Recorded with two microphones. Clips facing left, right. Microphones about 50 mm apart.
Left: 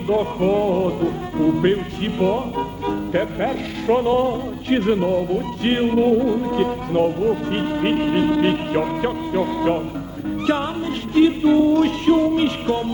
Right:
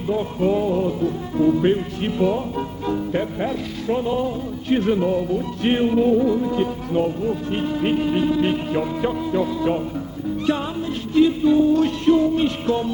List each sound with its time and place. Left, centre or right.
0.1 s music: left
1.4 s speech: left
6.6 s music: left
11.1 s music: left
12.1 s music: left